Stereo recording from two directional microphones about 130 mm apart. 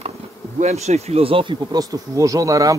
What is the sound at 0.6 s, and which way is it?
Speech, 55° right (ahead or behind).